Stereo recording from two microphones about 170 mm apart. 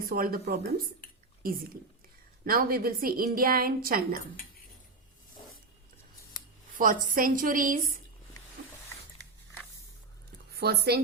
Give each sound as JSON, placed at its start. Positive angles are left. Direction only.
{"t": 0.0, "sound": "a woman's voice", "side_deg": -60}
{"t": 6.7, "sound": "a woman's voice", "side_deg": -55}
{"t": 10.5, "sound": "speech", "side_deg": -70}